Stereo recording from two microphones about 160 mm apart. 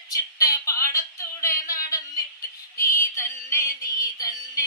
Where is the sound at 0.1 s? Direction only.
20° left (ahead or behind).